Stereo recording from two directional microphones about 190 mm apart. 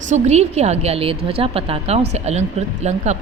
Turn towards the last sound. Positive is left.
turn(degrees=-35)  # may be behind; listen again after turning